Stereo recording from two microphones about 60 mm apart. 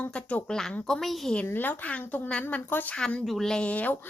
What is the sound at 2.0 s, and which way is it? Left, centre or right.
Speech, left.